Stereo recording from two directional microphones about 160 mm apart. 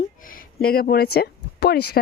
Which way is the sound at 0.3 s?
65° left (ahead or behind).